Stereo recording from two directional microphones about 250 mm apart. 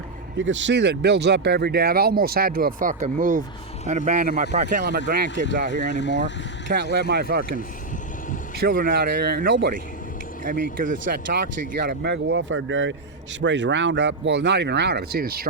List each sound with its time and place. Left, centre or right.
0.3 s speech: right
5.7 s speech: left
6.7 s speech: right
8.6 s speech: right